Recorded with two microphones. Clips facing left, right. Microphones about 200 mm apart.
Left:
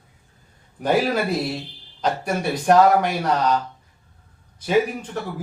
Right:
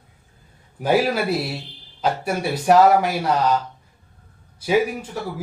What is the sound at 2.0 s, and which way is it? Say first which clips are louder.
A man's voice: right 1 dB; 5° right (ahead or behind).